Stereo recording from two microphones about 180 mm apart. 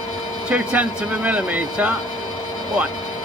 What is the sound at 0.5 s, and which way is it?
Speech, 5° right (ahead or behind).